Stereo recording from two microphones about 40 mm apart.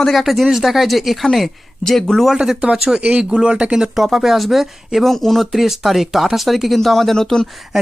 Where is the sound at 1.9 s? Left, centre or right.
Centre.